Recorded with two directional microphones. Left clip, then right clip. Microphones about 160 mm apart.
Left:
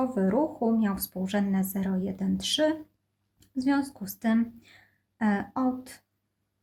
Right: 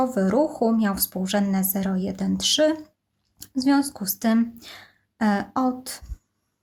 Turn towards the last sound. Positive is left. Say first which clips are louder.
# right 5 dB
turn(degrees=-25)  # may be behind; listen again after turning